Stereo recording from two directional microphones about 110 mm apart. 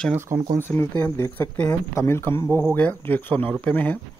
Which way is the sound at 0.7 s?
20° left (ahead or behind).